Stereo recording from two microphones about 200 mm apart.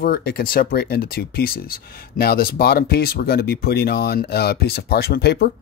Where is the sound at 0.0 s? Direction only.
50° left (ahead or behind).